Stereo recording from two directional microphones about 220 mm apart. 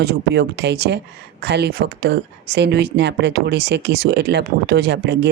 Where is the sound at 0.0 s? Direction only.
45° right (ahead or behind).